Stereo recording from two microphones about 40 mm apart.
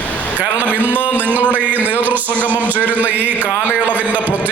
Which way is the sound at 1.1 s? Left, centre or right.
Right.